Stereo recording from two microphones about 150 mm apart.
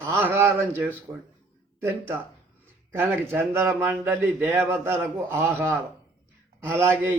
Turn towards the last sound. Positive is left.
turn(degrees=-15)  # may be behind; listen again after turning